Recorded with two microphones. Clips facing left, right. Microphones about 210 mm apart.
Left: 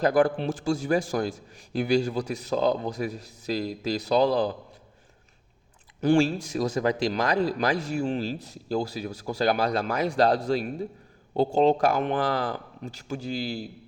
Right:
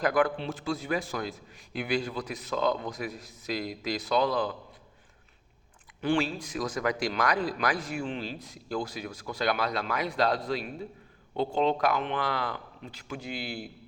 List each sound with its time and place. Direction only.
0.0 s speech: 30° left (ahead or behind)
0.3 s speech: 45° left (ahead or behind)
6.0 s speech: 40° left (ahead or behind)
7.9 s speech: 40° left (ahead or behind)